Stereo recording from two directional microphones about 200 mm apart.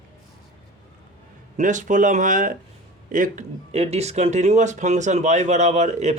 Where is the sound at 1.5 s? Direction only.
40° right (ahead or behind).